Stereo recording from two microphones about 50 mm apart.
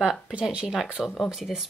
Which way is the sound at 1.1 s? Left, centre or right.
Centre.